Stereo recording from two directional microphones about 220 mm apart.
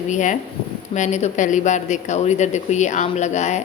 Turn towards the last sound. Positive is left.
turn(degrees=30)  # may be behind; listen again after turning